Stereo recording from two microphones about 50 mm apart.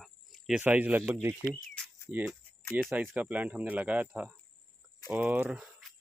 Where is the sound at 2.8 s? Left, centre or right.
Right.